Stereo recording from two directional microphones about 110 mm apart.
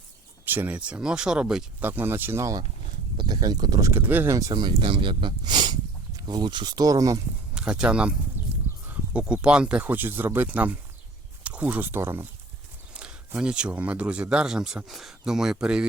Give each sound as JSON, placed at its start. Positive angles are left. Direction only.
{"t": 0.4, "sound": "speech", "side_deg": -20}
{"t": 1.8, "sound": "speech", "side_deg": -20}
{"t": 3.9, "sound": "speech", "side_deg": -20}
{"t": 4.4, "sound": "speech", "side_deg": -35}
{"t": 7.5, "sound": "speech", "side_deg": -10}
{"t": 12.9, "sound": "speech", "side_deg": -10}